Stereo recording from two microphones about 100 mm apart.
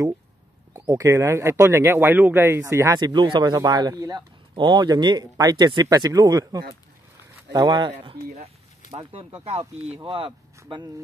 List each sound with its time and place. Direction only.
0.8 s speech: 30° right (ahead or behind)
3.0 s speech: 50° right (ahead or behind)
3.5 s speech: 40° right (ahead or behind); by 8.5 s 65° right (ahead or behind)
9.2 s speech: 55° right (ahead or behind)
10.0 s speech: 65° right (ahead or behind)